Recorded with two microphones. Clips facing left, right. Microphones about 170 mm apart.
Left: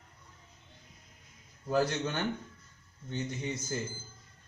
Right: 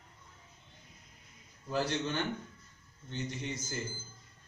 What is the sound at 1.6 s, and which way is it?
Speech, 45° left (ahead or behind).